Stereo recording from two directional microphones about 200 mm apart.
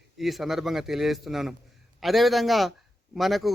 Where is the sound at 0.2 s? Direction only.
Centre (ahead or behind).